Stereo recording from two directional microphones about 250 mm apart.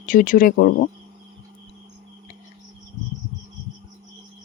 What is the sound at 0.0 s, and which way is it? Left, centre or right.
Speech, left.